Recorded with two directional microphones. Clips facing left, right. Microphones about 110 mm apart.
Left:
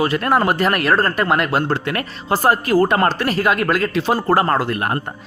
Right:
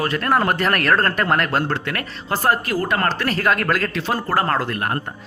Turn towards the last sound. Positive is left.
turn(degrees=15)  # may be behind; listen again after turning